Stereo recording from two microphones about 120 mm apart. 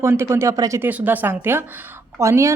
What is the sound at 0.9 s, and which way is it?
Speech, 15° right (ahead or behind).